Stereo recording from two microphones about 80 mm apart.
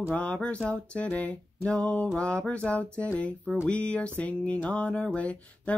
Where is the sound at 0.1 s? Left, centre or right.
Centre.